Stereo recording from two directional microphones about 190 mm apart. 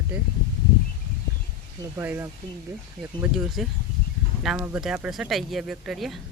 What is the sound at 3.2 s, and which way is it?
Speech, centre (ahead or behind).